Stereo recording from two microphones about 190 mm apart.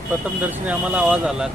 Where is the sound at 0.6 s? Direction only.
10° right (ahead or behind).